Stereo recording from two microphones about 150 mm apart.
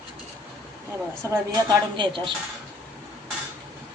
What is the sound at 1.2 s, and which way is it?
A woman's voice, 20° right (ahead or behind).